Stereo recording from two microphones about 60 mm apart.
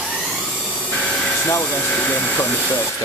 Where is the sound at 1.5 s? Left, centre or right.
Left.